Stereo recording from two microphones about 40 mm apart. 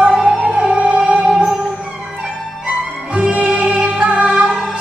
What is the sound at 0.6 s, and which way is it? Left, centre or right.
Music, right.